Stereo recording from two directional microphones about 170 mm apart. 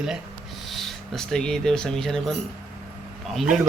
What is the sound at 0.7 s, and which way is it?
Speech, centre (ahead or behind).